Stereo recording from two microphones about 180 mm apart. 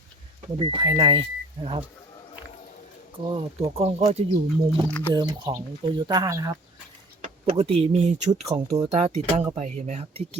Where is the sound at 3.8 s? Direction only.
35° right (ahead or behind).